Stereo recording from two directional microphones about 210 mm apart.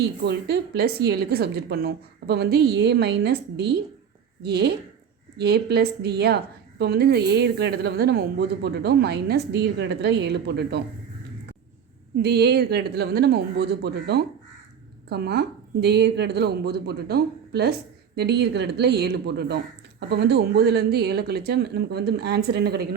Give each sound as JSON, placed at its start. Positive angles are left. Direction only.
{"t": 0.3, "sound": "speech", "side_deg": -50}
{"t": 12.1, "sound": "speech", "side_deg": -50}